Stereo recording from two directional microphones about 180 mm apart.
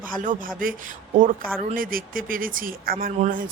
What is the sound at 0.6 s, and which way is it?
Speech, 50° right (ahead or behind).